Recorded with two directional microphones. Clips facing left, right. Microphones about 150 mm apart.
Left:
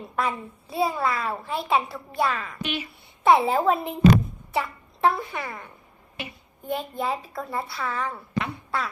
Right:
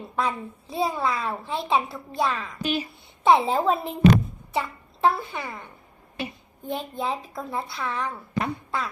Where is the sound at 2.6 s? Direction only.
35° right (ahead or behind).